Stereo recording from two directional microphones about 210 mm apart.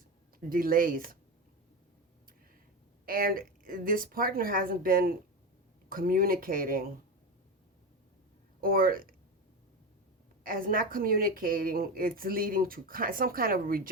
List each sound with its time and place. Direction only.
0.3 s speech: 45° right (ahead or behind)
3.1 s speech: 45° right (ahead or behind)
8.6 s speech: 45° right (ahead or behind)
10.4 s speech: 40° right (ahead or behind)